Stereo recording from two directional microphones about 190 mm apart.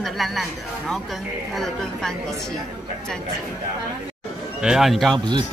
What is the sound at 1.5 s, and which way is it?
Speech, centre (ahead or behind).